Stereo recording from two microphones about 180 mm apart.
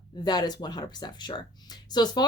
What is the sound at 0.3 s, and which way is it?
Speech, 25° left (ahead or behind).